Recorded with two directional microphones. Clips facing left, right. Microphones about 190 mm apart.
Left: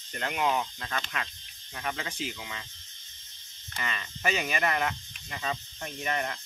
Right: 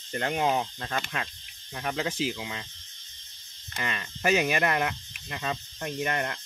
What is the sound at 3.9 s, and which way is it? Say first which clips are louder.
Speech: right 6 dB; 45° right (ahead or behind).